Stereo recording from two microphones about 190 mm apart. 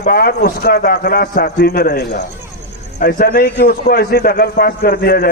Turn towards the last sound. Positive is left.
turn(degrees=55)  # may be behind; listen again after turning